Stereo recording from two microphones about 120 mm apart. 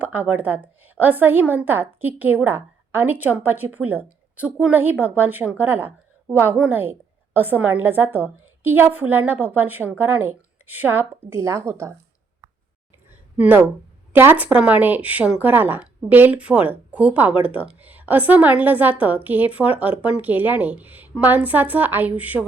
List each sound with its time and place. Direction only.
0.0 s a woman's voice: 15° right (ahead or behind)
13.1 s a sound: 15° right (ahead or behind)
14.1 s a woman's voice: 15° right (ahead or behind)